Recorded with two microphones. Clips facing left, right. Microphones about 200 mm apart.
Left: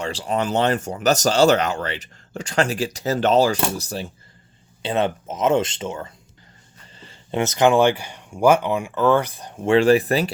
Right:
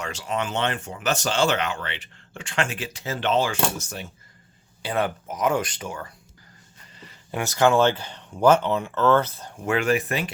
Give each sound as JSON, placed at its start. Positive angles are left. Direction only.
{"t": 0.0, "sound": "speech", "side_deg": 35}
{"t": 4.8, "sound": "speech", "side_deg": 25}
{"t": 9.6, "sound": "speech", "side_deg": 30}